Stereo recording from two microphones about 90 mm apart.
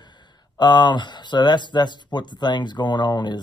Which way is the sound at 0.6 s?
50° left (ahead or behind).